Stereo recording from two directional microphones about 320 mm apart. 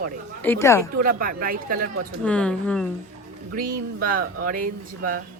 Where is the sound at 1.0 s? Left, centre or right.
Right.